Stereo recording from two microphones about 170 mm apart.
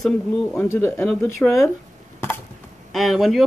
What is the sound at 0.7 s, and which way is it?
Speech, 15° left (ahead or behind).